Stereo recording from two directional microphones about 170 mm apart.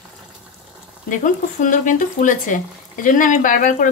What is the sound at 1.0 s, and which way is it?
Speech, 50° left (ahead or behind).